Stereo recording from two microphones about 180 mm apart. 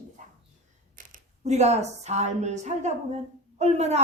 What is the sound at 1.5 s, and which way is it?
A woman's voice, 40° right (ahead or behind).